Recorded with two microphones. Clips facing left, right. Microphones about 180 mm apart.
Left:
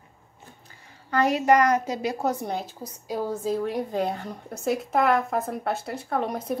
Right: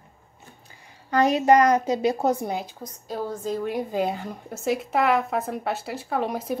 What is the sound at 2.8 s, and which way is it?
A woman's voice, 5° left (ahead or behind).